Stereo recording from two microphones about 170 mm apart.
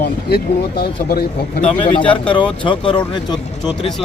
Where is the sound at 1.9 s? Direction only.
30° left (ahead or behind).